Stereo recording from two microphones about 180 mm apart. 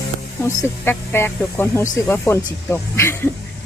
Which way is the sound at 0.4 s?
15° left (ahead or behind).